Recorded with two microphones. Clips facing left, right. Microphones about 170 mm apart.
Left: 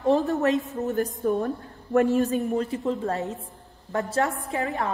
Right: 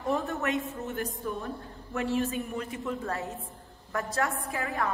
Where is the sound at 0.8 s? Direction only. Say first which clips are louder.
Left 9 dB; 45° left (ahead or behind).